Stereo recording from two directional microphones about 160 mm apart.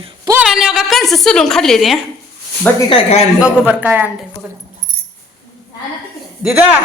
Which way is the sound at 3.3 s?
10° right (ahead or behind).